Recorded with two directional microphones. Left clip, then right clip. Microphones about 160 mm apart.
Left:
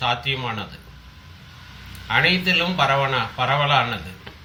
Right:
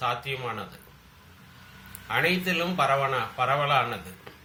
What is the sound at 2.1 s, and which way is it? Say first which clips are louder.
A man's voice: left 7 dB; 15° right (ahead or behind).